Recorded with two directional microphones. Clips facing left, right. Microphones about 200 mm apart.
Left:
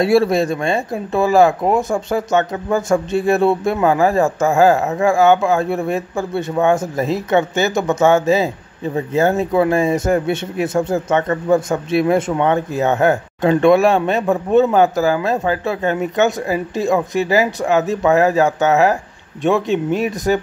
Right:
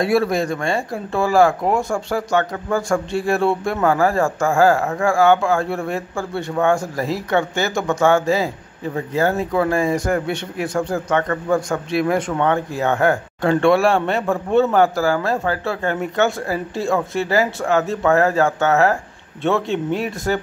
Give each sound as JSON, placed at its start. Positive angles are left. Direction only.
{"t": 0.0, "sound": "speech", "side_deg": 25}